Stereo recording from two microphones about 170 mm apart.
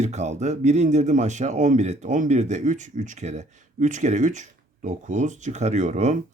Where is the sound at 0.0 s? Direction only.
40° right (ahead or behind).